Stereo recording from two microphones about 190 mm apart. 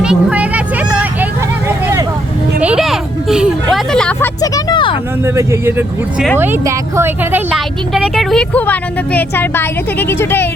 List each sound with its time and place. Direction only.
0.0 s vehicle: 5° right (ahead or behind)
2.6 s a sound: 5° right (ahead or behind)
4.4 s music: 20° left (ahead or behind)
5.2 s speech: 15° right (ahead or behind)
7.5 s a woman's voice: centre (ahead or behind)